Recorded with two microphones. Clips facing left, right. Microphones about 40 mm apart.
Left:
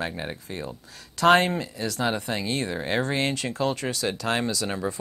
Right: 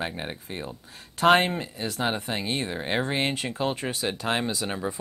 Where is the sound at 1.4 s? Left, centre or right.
Right.